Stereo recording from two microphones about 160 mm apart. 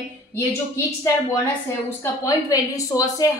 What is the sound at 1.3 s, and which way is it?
A woman's voice, 15° left (ahead or behind).